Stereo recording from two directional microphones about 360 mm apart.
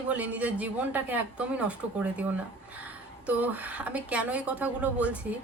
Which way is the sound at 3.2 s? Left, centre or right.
Centre.